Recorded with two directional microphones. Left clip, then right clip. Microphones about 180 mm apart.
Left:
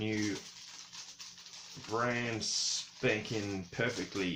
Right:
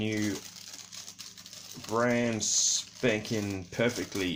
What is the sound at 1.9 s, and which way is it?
Speech, 45° right (ahead or behind).